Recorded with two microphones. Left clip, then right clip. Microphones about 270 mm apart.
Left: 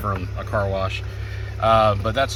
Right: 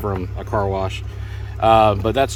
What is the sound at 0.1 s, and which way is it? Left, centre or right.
Speech, centre.